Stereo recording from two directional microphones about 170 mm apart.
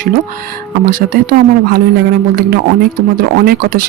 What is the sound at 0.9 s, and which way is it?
Speech, 55° right (ahead or behind).